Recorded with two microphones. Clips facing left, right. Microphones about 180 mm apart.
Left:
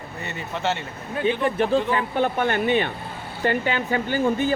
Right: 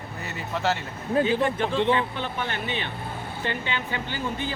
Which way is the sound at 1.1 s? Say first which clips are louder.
Left 1 dB; 35° right (ahead or behind).